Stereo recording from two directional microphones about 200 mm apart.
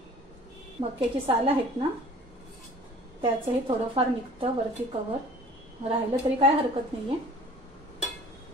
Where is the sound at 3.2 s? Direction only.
25° right (ahead or behind).